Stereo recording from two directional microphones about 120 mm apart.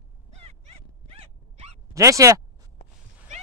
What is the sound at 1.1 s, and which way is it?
Dog, 55° right (ahead or behind).